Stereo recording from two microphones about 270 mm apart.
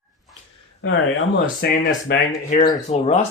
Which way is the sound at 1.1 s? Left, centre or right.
Left.